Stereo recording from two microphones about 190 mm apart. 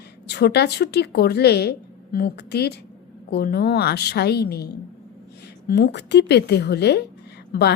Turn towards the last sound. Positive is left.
turn(degrees=50)  # may be behind; listen again after turning